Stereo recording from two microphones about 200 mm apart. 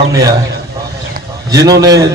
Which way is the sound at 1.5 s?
15° right (ahead or behind).